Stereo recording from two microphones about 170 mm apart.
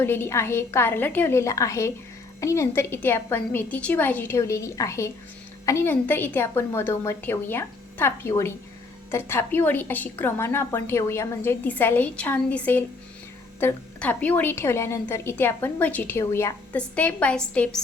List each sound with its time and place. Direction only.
0.0 s a woman's voice: 15° left (ahead or behind)